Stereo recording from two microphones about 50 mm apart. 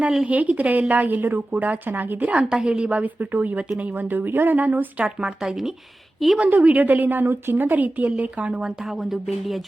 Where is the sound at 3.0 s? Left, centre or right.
Right.